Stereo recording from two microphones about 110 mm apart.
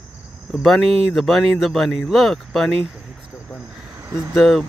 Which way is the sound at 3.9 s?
35° right (ahead or behind).